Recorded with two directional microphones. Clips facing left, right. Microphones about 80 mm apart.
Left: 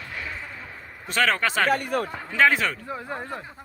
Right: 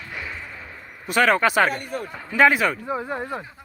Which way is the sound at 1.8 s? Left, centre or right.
Left.